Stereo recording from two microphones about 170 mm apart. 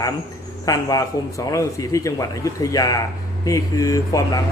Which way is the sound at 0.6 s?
20° left (ahead or behind).